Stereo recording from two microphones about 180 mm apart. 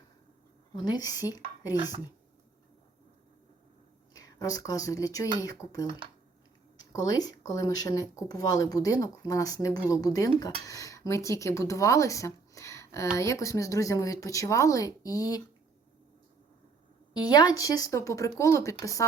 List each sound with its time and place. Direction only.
0.7 s speech: 25° left (ahead or behind)
4.1 s a woman's voice: 20° left (ahead or behind)
6.9 s a woman's voice: 20° left (ahead or behind)
17.2 s speech: 25° left (ahead or behind)